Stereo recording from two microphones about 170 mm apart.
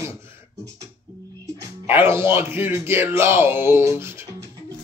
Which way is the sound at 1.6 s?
15° right (ahead or behind).